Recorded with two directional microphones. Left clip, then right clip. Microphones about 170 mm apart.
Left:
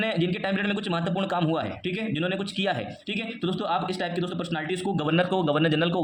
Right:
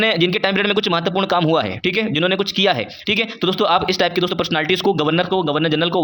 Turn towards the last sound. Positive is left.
turn(degrees=-20)  # may be behind; listen again after turning